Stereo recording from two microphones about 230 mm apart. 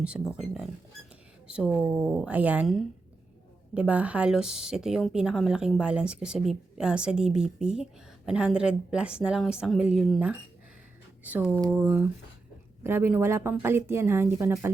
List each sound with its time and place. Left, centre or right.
1.5 s speech: centre